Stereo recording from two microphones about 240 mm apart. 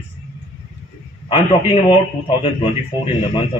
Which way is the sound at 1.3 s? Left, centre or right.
Left.